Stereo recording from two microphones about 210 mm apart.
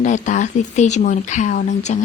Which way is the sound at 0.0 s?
35° left (ahead or behind).